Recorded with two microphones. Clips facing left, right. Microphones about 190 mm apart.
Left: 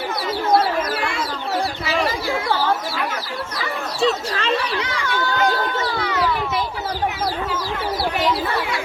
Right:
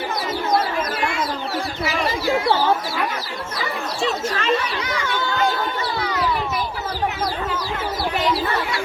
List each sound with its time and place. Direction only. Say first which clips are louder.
4.0 s chatter: left 2 dB; 30° left (ahead or behind)